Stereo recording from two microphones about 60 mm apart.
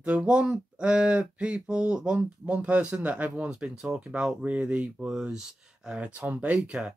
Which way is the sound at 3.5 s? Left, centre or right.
Centre.